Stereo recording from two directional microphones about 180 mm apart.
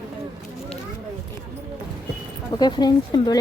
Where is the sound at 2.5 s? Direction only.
25° left (ahead or behind).